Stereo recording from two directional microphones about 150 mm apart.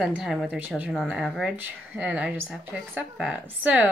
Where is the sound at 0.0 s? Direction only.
5° right (ahead or behind).